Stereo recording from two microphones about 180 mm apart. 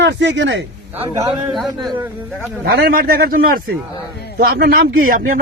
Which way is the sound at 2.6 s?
55° right (ahead or behind).